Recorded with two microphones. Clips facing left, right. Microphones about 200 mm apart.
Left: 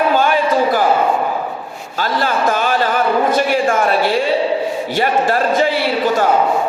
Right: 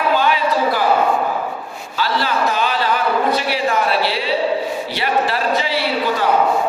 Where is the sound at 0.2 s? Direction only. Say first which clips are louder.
Left 3 dB; 50° left (ahead or behind).